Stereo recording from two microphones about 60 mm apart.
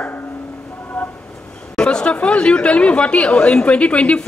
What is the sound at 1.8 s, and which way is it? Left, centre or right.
Chatter, centre.